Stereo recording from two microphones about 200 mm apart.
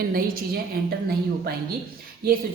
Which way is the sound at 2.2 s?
50° right (ahead or behind).